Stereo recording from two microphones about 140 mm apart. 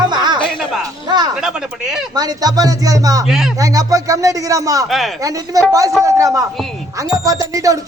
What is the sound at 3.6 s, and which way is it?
A man's voice, 25° right (ahead or behind).